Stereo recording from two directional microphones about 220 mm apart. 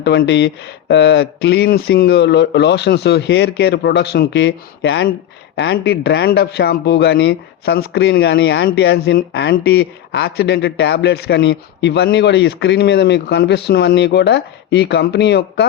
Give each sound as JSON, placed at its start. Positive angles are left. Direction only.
{"t": 0.0, "sound": "speech", "side_deg": 50}